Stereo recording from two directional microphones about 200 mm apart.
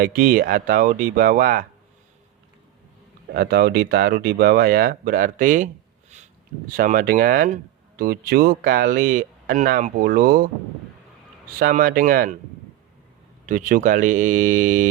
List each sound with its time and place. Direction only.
0.0 s speech: 45° right (ahead or behind)
3.3 s speech: 50° right (ahead or behind)
11.6 s speech: 45° right (ahead or behind)
13.4 s speech: 40° right (ahead or behind)